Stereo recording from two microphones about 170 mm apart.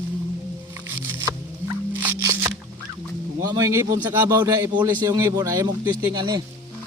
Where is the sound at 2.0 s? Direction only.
15° right (ahead or behind).